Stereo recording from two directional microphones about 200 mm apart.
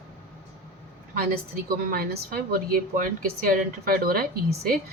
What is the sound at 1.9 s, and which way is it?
A woman's voice, 50° right (ahead or behind).